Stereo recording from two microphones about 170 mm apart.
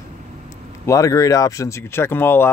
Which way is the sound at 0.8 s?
20° left (ahead or behind).